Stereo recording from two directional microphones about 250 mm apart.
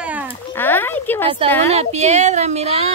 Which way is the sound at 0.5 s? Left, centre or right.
Centre.